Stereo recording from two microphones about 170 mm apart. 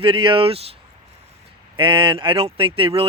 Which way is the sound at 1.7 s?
30° right (ahead or behind).